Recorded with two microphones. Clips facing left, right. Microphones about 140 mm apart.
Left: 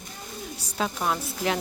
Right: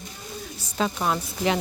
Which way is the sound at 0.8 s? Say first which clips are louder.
Right 2 dB; centre (ahead or behind).